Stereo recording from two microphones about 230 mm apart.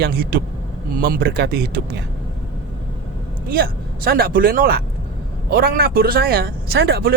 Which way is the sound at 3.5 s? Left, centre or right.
Right.